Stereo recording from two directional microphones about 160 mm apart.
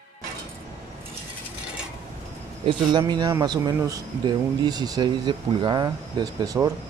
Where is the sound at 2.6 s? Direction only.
30° right (ahead or behind).